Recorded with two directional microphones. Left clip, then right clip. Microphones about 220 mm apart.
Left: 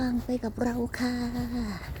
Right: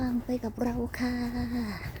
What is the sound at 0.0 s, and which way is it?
Speech, 5° left (ahead or behind).